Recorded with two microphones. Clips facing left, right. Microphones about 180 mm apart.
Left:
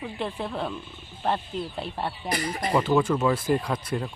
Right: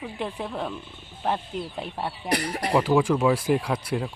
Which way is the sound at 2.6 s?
10° right (ahead or behind).